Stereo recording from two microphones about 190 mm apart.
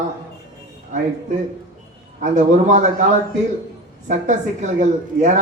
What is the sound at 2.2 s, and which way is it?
Speech, 40° right (ahead or behind).